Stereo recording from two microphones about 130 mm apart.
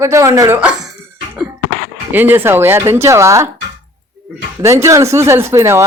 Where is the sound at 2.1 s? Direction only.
15° right (ahead or behind).